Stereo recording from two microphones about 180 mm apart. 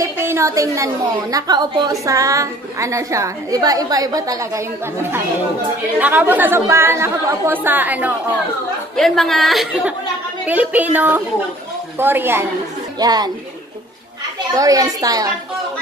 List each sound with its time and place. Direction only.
0.0 s a woman's voice: 15° right (ahead or behind)
5.9 s a woman's voice: 10° right (ahead or behind)
8.9 s a woman's voice: centre (ahead or behind); by 13.3 s 20° right (ahead or behind)
14.5 s a woman's voice: 20° right (ahead or behind)